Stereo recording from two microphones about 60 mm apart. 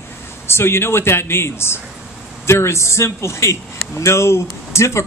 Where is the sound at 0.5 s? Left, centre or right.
Left.